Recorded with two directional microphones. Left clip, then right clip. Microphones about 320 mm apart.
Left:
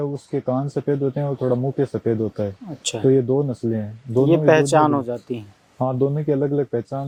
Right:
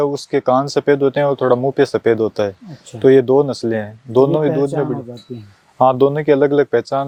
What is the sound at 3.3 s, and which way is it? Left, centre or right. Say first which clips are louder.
Speech: right 7 dB; centre.